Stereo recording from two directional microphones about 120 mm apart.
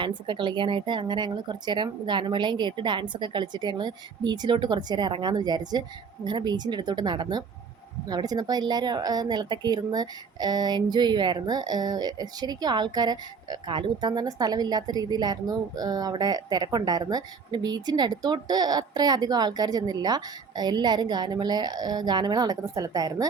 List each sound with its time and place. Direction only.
0.0 s speech: 40° right (ahead or behind)